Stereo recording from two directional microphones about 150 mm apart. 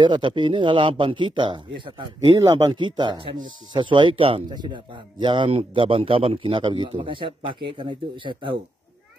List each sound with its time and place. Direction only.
0.0 s speech: 30° right (ahead or behind)